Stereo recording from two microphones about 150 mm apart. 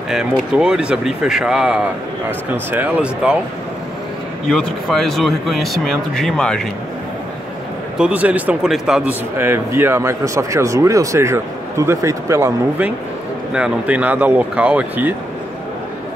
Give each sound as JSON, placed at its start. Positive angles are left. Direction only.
{"t": 0.1, "sound": "speech", "side_deg": -5}
{"t": 4.5, "sound": "speech", "side_deg": 0}
{"t": 8.0, "sound": "speech", "side_deg": -10}
{"t": 9.4, "sound": "speech", "side_deg": -15}